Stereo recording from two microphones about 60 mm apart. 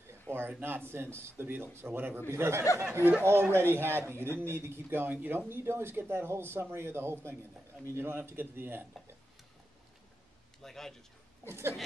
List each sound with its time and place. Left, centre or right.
0.3 s a man's voice: right
10.6 s a man's voice: centre
11.4 s a man's voice: right